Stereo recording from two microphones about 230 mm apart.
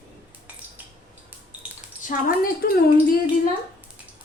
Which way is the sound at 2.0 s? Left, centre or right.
Left.